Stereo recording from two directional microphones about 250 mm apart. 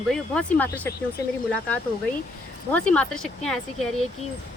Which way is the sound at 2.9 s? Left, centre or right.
Centre.